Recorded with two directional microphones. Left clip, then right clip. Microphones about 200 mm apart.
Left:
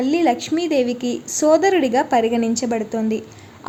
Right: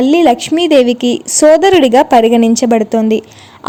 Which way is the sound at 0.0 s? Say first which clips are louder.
Right 9 dB; 40° right (ahead or behind).